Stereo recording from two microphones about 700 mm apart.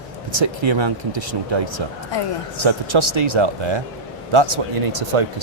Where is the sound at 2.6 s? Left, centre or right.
Right.